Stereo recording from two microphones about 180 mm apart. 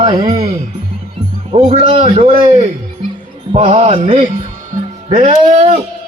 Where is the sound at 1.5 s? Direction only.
40° right (ahead or behind).